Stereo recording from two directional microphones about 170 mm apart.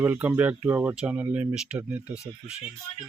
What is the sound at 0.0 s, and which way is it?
Speech, 10° right (ahead or behind).